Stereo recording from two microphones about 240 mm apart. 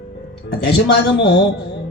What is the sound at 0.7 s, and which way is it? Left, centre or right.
Speech, left.